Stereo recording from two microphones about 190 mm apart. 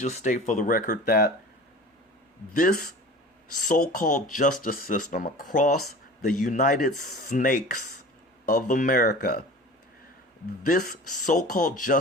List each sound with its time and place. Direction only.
0.0 s speech: 40° left (ahead or behind)
2.6 s speech: 50° left (ahead or behind)
10.7 s speech: 45° left (ahead or behind)